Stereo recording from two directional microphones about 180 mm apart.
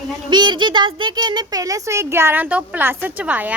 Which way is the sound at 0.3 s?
25° right (ahead or behind).